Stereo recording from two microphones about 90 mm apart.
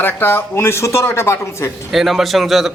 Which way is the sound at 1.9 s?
5° right (ahead or behind).